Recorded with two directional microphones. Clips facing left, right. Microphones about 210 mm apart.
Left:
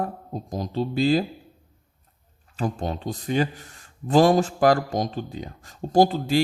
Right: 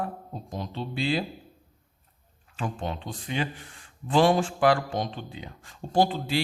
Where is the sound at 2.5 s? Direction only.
40° left (ahead or behind).